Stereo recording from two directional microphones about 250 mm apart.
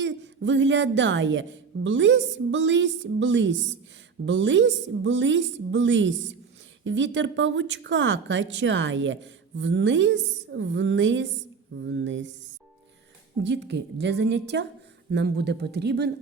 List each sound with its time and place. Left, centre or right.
0.0 s a woman's voice: right
13.4 s a woman's voice: right